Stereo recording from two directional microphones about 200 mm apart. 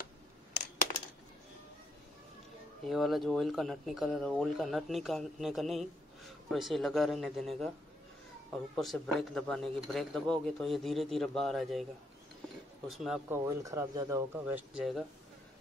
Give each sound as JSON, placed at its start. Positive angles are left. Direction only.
{"t": 2.9, "sound": "speech", "side_deg": 0}
{"t": 12.9, "sound": "speech", "side_deg": 0}
{"t": 13.5, "sound": "speech", "side_deg": -15}